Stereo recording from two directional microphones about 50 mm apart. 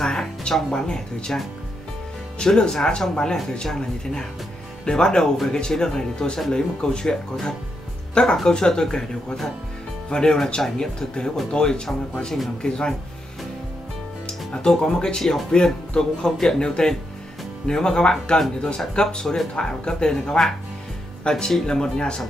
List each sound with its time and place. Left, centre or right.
0.0 s speech: centre
14.2 s speech: centre